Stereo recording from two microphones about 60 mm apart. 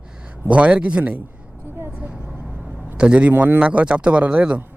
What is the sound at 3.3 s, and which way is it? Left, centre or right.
Speech, right.